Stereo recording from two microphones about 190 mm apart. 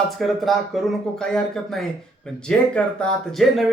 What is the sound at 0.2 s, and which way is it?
Speech, centre (ahead or behind).